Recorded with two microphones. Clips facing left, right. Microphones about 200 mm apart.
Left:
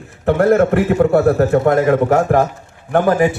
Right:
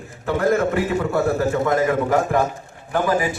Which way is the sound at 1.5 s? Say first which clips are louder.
Left 6 dB; 60° left (ahead or behind).